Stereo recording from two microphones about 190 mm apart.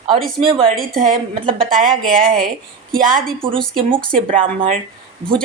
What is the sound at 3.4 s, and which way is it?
Speech, 30° right (ahead or behind).